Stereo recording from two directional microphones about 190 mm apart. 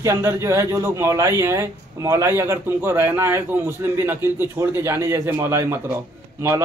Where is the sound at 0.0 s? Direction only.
15° right (ahead or behind).